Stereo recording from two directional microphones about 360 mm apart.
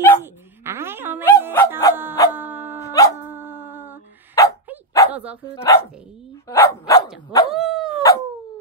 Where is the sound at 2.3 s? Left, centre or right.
Centre.